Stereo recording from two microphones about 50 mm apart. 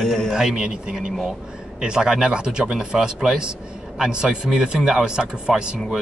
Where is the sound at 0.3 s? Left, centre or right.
Centre.